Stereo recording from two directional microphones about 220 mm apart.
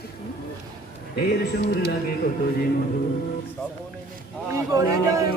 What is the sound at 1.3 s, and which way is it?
Speech, 50° left (ahead or behind).